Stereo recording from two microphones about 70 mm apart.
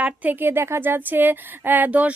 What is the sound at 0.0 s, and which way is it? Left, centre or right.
A woman's voice, right.